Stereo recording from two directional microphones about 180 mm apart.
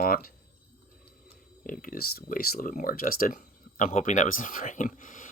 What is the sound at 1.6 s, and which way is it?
Speech, 50° left (ahead or behind).